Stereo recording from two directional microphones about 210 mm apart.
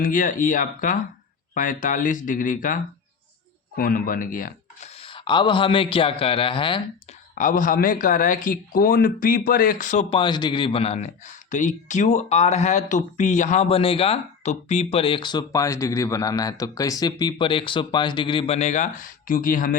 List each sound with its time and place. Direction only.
0.0 s speech: 40° left (ahead or behind)
4.9 s a man's voice: 25° left (ahead or behind)
7.3 s speech: 40° left (ahead or behind)